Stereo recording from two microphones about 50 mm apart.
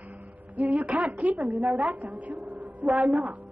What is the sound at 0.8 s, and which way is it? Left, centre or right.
A woman's voice, right.